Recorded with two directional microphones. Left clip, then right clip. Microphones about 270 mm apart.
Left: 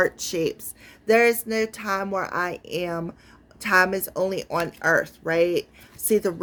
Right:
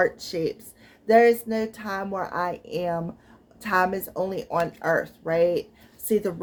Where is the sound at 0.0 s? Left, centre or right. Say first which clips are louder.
Left 1 dB; left.